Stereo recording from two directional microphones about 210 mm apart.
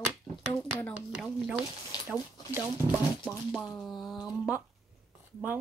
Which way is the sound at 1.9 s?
20° left (ahead or behind).